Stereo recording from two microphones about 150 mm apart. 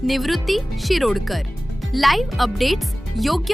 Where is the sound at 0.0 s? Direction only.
Centre (ahead or behind).